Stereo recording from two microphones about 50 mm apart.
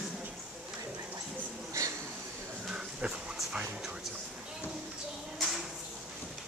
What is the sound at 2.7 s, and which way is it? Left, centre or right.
Dog, centre.